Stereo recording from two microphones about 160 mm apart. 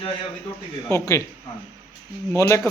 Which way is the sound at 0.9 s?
20° left (ahead or behind).